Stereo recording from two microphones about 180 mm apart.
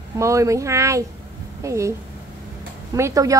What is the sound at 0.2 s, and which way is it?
A woman's voice, 15° right (ahead or behind).